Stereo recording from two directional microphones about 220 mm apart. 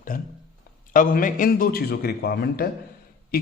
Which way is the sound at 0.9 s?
40° left (ahead or behind).